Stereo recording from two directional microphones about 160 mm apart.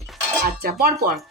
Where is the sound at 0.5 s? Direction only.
80° right.